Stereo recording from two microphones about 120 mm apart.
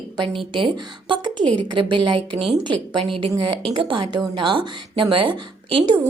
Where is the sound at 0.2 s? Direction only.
40° right (ahead or behind).